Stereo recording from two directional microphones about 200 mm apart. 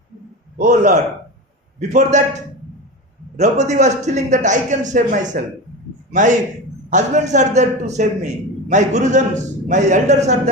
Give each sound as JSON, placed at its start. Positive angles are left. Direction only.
{"t": 0.6, "sound": "a man's voice", "side_deg": -35}
{"t": 3.3, "sound": "a man's voice", "side_deg": -35}